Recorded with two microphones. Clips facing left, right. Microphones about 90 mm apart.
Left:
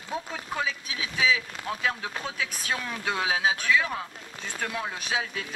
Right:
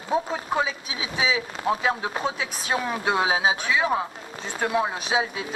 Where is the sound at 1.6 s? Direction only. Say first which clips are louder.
Right 6 dB; 25° right (ahead or behind).